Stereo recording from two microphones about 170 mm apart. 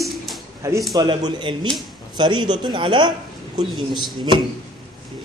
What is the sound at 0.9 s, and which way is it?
A woman's voice, 25° right (ahead or behind).